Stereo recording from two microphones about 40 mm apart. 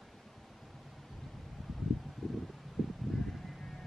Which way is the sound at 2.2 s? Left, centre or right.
Centre.